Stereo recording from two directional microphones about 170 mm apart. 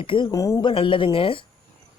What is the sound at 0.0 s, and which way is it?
Speech, 30° left (ahead or behind).